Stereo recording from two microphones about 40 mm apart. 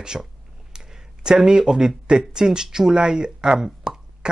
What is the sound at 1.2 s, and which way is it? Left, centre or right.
Speech, centre.